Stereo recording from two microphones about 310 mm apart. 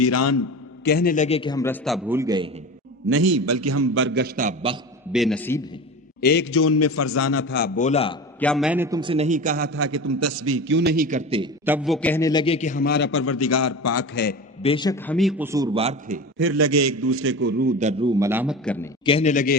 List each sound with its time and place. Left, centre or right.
0.0 s a man's voice: left
0.9 s a man's voice: left; by 2.5 s centre
3.1 s a man's voice: right
5.1 s a man's voice: centre
6.1 s a man's voice: left; by 8.2 s centre
8.4 s a man's voice: centre; by 9.7 s right
9.7 s a man's voice: right; by 11.4 s centre
11.6 s a man's voice: centre; by 14.2 s left
14.6 s a man's voice: centre; by 16.2 s right
16.4 s a man's voice: right; by 18.9 s centre
19.0 s a man's voice: centre